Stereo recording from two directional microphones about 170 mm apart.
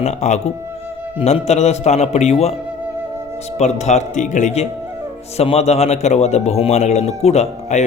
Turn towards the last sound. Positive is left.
turn(degrees=40)  # may be behind; listen again after turning